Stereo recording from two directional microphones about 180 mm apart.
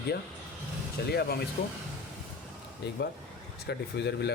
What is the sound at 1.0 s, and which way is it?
Speech, 65° left (ahead or behind).